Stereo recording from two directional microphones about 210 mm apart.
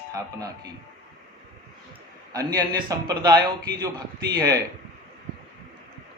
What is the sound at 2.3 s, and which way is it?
A man's voice, 15° right (ahead or behind).